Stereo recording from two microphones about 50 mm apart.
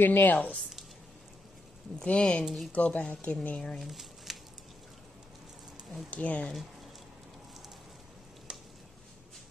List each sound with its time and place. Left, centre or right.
0.0 s speech: left
0.6 s a sound: centre
2.0 s speech: left
3.8 s squish: centre
6.0 s speech: left